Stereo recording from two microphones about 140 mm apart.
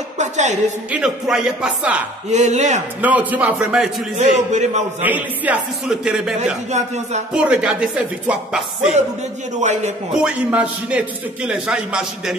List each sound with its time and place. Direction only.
0.2 s a sound: 55° right (ahead or behind)
0.9 s speech: 5° right (ahead or behind)
2.3 s a man's voice: 55° right (ahead or behind)
3.0 s a man's voice: 10° right (ahead or behind)
4.2 s a man's voice: 55° right (ahead or behind)
5.0 s a man's voice: 10° right (ahead or behind)
6.7 s speech: 55° right (ahead or behind)
7.3 s a man's voice: 5° right (ahead or behind)
9.6 s a man's voice: 60° right (ahead or behind)
10.2 s a man's voice: 10° right (ahead or behind)